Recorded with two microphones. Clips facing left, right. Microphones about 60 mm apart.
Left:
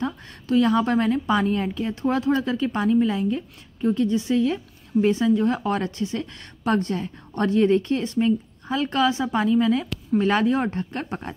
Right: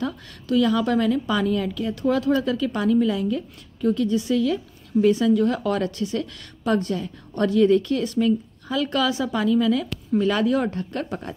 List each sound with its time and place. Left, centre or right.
0.0 s a woman's voice: left